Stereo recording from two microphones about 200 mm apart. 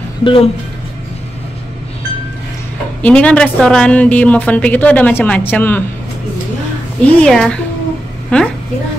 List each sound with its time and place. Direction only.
0.2 s speech: 25° left (ahead or behind)
3.0 s a woman's voice: 5° left (ahead or behind)
7.1 s speech: 5° left (ahead or behind)